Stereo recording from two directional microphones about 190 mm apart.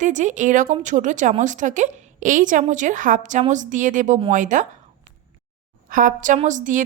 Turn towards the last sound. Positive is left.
turn(degrees=-40)  # may be behind; listen again after turning